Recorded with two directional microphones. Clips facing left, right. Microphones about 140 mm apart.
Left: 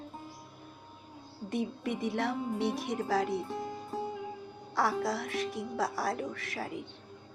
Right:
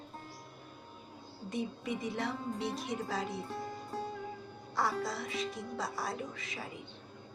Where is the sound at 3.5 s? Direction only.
15° left (ahead or behind).